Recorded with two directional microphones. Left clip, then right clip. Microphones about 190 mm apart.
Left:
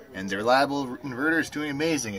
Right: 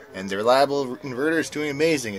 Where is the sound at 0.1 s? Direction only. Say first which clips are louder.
Right 3 dB; 25° right (ahead or behind).